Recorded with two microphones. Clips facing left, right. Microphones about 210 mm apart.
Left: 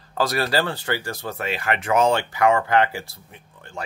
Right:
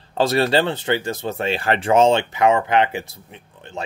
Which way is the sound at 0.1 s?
25° right (ahead or behind).